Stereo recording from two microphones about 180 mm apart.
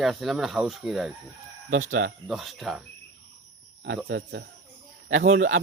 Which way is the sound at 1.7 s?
90° right.